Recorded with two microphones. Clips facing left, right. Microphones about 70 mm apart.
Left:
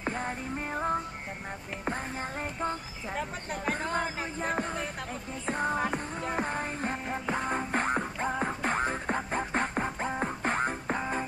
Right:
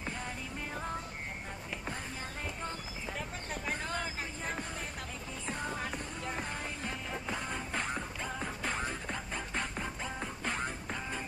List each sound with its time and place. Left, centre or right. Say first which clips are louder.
0.0 s music: left 7 dB; left
2.6 s clip-clop: left 7 dB; left
3.6 s music: left 7 dB; left